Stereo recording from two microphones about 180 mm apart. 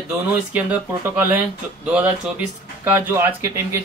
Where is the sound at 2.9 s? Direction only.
10° right (ahead or behind).